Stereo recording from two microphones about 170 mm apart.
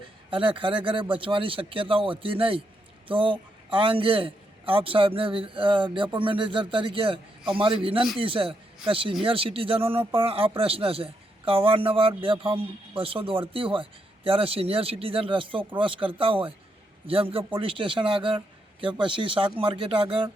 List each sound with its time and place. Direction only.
0.3 s a man's voice: 30° right (ahead or behind)